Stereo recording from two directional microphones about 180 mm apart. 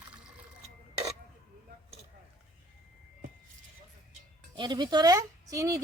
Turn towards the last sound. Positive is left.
turn(degrees=-20)  # may be behind; listen again after turning